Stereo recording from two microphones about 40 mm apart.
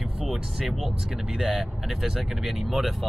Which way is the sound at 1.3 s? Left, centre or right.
Centre.